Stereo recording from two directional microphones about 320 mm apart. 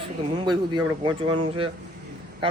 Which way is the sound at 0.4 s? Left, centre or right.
Centre.